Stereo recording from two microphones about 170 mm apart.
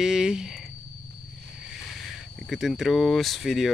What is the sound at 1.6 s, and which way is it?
Speech, centre (ahead or behind).